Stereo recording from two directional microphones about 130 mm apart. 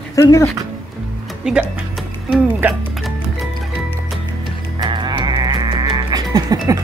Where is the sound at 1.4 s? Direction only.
5° right (ahead or behind).